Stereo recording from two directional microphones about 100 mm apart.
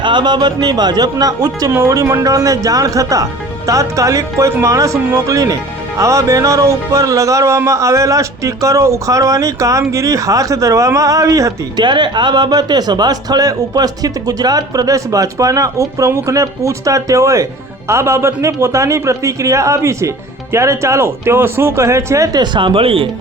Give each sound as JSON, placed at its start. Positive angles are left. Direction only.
{"t": 0.0, "sound": "speech", "side_deg": -50}
{"t": 11.8, "sound": "speech", "side_deg": -50}
{"t": 22.5, "sound": "speech", "side_deg": -60}